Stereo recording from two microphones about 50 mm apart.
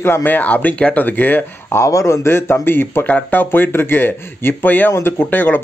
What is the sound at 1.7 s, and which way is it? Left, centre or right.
A man's voice, left.